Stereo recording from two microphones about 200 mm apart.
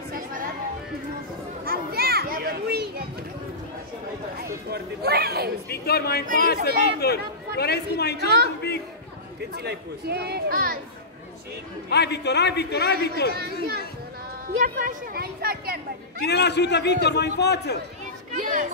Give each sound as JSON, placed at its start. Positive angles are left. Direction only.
{"t": 0.1, "sound": "a sound", "side_deg": -45}
{"t": 1.6, "sound": "children playing", "side_deg": -50}
{"t": 4.4, "sound": "speech", "side_deg": -50}
{"t": 5.7, "sound": "a man's voice", "side_deg": 55}
{"t": 9.4, "sound": "speech", "side_deg": -55}
{"t": 11.9, "sound": "a man's voice", "side_deg": 55}
{"t": 13.3, "sound": "speech", "side_deg": -50}
{"t": 14.5, "sound": "speech", "side_deg": -40}
{"t": 16.3, "sound": "a man's voice", "side_deg": 55}
{"t": 18.3, "sound": "speech", "side_deg": -40}